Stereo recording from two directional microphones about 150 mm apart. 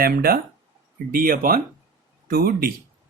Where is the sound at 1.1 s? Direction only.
70° right (ahead or behind).